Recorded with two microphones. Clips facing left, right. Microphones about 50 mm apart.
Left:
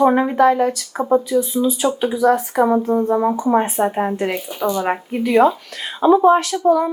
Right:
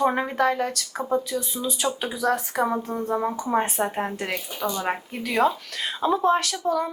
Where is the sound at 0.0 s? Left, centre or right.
Centre.